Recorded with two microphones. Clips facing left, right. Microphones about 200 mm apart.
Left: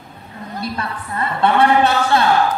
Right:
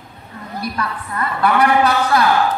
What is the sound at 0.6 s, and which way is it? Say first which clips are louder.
Speech: right 1 dB; 25° left (ahead or behind).